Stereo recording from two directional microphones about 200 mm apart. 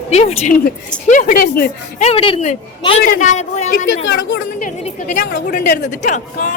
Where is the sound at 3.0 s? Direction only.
40° left (ahead or behind).